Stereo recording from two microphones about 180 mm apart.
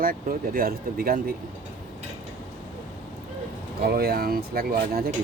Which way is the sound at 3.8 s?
55° right (ahead or behind).